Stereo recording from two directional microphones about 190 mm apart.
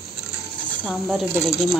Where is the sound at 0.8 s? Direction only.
Centre (ahead or behind).